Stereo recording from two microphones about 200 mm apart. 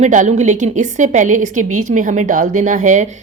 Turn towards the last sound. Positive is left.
turn(degrees=-40)  # may be behind; listen again after turning